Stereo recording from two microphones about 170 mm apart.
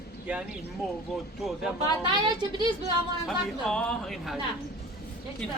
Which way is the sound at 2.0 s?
25° right (ahead or behind).